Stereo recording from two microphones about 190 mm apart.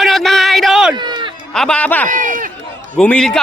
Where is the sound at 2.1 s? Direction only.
45° right (ahead or behind).